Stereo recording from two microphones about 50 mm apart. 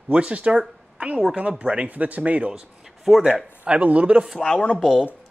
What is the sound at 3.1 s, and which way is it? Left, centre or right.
Speech, centre.